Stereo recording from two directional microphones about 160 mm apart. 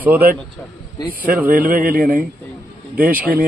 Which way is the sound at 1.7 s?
65° right (ahead or behind).